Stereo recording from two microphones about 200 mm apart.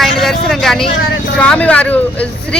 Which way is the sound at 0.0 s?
Centre (ahead or behind).